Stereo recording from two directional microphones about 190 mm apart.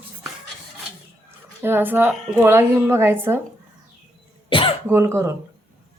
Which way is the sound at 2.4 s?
10° right (ahead or behind).